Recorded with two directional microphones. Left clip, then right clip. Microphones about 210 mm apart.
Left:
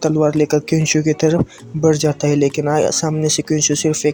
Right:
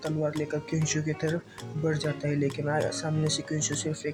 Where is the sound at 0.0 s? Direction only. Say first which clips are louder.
Left 15 dB; 35° left (ahead or behind).